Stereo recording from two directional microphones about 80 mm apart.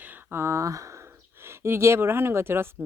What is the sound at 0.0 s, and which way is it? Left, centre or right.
Speech, right.